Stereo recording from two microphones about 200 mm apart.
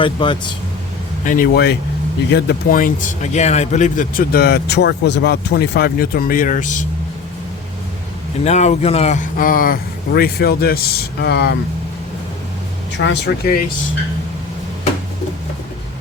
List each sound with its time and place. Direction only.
0.0 s speech: 25° left (ahead or behind)
1.2 s speech: 40° left (ahead or behind)
8.4 s speech: 35° left (ahead or behind); by 11.5 s 55° left (ahead or behind)
13.0 s speech: 60° left (ahead or behind)